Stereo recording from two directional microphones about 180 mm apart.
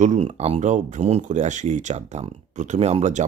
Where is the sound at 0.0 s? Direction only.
40° right (ahead or behind).